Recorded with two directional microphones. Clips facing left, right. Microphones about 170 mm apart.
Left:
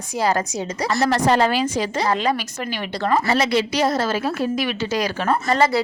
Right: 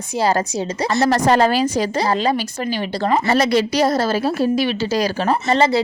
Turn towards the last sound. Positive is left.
turn(degrees=-25)  # may be behind; listen again after turning